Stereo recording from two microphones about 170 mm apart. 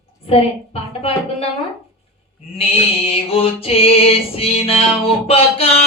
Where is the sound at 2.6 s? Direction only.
35° left (ahead or behind).